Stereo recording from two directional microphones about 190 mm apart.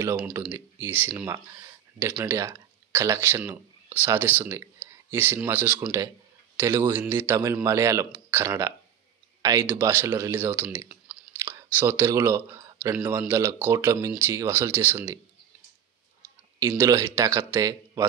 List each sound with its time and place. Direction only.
0.2 s speech: 10° right (ahead or behind)
16.5 s speech: 15° right (ahead or behind)